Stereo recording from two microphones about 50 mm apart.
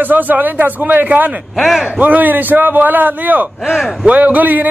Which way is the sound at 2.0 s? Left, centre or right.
Right.